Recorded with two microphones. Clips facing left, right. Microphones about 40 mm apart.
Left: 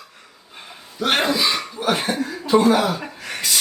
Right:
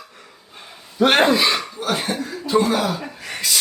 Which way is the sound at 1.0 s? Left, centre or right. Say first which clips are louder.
Right 4 dB; right.